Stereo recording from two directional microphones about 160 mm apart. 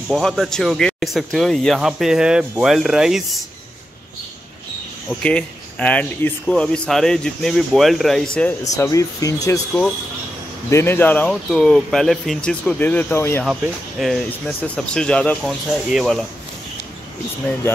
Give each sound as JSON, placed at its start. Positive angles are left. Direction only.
{"t": 0.1, "sound": "speech", "side_deg": 0}
{"t": 5.2, "sound": "speech", "side_deg": 5}
{"t": 8.7, "sound": "speech", "side_deg": 20}
{"t": 10.7, "sound": "speech", "side_deg": 15}
{"t": 13.4, "sound": "speech", "side_deg": 0}